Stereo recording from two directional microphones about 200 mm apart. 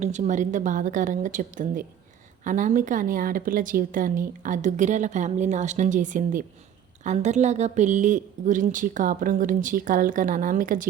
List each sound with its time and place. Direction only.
0.0 s a woman's voice: 35° right (ahead or behind)